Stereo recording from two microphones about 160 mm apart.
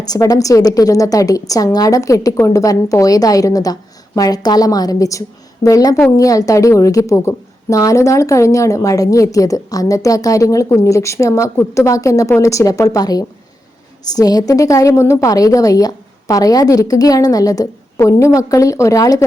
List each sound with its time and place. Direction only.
0.0 s a woman's voice: 25° left (ahead or behind)